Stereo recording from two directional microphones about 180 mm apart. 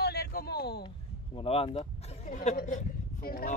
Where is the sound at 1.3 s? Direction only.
30° left (ahead or behind); by 3.6 s 55° left (ahead or behind).